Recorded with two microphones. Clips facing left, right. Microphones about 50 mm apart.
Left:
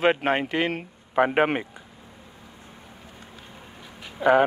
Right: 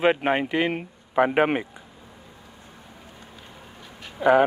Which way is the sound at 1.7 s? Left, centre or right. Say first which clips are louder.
Even; centre.